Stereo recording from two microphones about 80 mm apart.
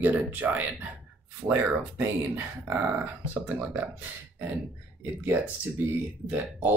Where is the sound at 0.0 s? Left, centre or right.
Right.